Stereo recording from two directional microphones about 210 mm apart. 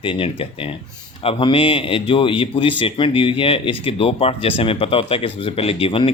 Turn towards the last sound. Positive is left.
turn(degrees=25)  # may be behind; listen again after turning